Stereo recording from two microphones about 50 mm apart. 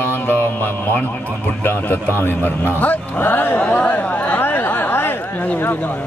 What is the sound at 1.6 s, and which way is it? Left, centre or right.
Speech, left.